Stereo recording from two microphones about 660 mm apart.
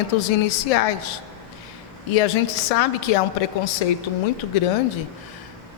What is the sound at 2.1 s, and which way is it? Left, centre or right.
Speech, left.